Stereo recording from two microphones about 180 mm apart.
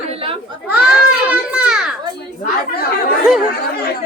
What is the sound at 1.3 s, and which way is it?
Speech, 5° right (ahead or behind).